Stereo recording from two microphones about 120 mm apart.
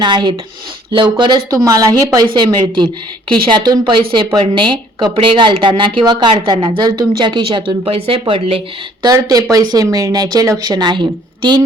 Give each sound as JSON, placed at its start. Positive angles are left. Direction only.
{"t": 0.0, "sound": "speech", "side_deg": -40}
{"t": 1.5, "sound": "speech", "side_deg": -30}
{"t": 9.0, "sound": "speech", "side_deg": -30}